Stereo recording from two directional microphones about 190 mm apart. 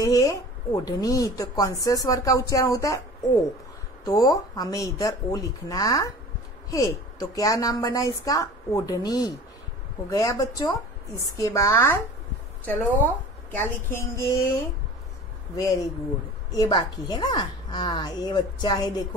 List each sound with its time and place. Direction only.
0.0 s a woman's voice: 20° left (ahead or behind)
4.0 s a woman's voice: 20° left (ahead or behind)
15.5 s a woman's voice: 20° left (ahead or behind)